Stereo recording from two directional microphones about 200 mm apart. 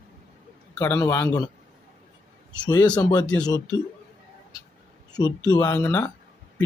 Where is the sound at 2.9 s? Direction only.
20° left (ahead or behind).